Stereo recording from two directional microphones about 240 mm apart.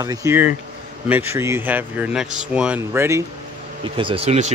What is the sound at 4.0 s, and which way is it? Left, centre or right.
Speech, right.